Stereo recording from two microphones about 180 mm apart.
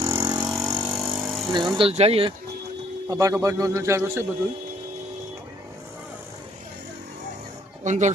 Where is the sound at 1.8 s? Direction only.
35° right (ahead or behind).